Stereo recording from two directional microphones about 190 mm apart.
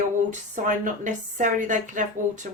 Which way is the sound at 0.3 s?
40° right (ahead or behind).